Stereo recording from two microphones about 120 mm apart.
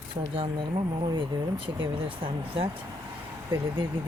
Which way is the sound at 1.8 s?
45° right (ahead or behind).